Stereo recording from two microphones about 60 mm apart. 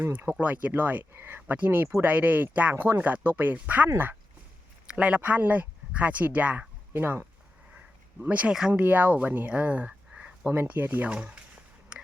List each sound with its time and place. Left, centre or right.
0.0 s speech: right
0.3 s speech: right
2.7 s speech: right
4.9 s speech: right
7.0 s speech: right
8.2 s speech: right
9.5 s a sound: right
10.5 s speech: right
11.1 s speech: centre